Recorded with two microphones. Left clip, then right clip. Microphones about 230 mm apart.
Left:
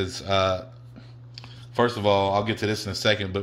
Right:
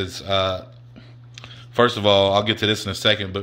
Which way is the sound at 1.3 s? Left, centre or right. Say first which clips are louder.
Right 5 dB; centre.